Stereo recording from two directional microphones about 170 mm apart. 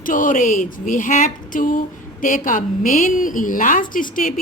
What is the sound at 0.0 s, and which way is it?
A woman's voice, 50° left (ahead or behind).